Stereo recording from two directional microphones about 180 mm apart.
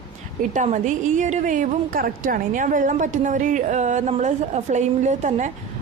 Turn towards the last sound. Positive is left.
turn(degrees=-40)  # may be behind; listen again after turning